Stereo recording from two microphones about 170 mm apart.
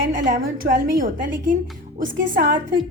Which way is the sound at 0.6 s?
70° right (ahead or behind).